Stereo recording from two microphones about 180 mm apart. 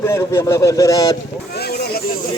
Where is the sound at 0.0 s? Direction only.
15° left (ahead or behind).